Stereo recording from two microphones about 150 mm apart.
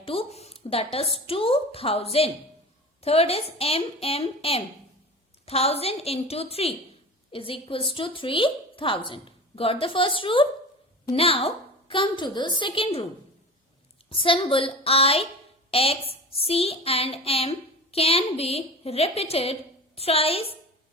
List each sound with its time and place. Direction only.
0.0 s a woman's voice: 40° left (ahead or behind)
14.1 s a woman's voice: 35° left (ahead or behind)